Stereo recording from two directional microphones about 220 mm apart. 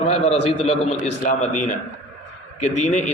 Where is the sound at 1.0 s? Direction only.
35° left (ahead or behind).